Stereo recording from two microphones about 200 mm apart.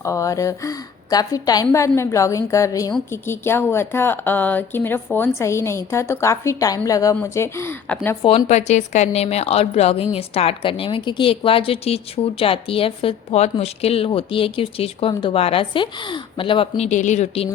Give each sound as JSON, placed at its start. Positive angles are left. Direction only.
{"t": 0.0, "sound": "speech", "side_deg": 15}
{"t": 8.2, "sound": "a woman's voice", "side_deg": 25}